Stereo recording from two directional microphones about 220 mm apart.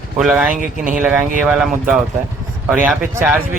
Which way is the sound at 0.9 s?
10° right (ahead or behind).